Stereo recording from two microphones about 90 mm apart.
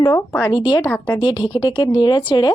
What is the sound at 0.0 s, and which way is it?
Speech, 45° left (ahead or behind).